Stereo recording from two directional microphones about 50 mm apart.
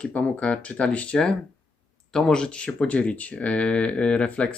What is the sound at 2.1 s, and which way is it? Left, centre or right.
Speech, centre.